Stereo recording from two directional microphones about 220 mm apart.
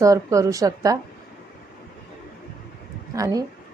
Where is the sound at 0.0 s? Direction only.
15° right (ahead or behind).